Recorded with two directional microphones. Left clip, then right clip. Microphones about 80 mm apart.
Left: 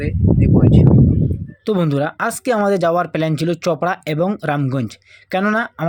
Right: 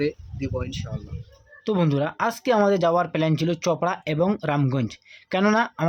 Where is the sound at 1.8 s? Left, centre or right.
Left.